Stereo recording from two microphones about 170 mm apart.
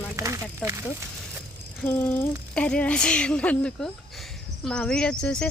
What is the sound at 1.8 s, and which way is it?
A woman's voice, 15° left (ahead or behind).